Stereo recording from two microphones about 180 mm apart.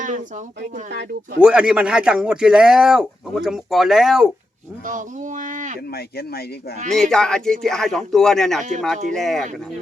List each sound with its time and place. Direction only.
0.0 s speech: 45° right (ahead or behind)
0.9 s speech: 65° right (ahead or behind)
1.4 s speech: 5° right (ahead or behind)
4.9 s speech: 45° right (ahead or behind)
5.9 s speech: 60° left (ahead or behind)
6.9 s speech: 5° left (ahead or behind)